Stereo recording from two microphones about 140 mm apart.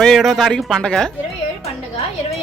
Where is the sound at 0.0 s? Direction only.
Centre (ahead or behind).